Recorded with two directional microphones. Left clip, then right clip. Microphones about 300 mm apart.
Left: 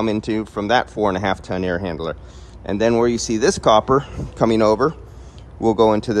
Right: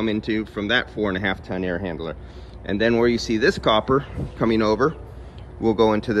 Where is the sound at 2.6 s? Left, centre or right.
Centre.